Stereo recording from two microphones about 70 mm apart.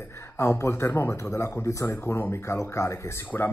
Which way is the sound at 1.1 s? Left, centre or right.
Left.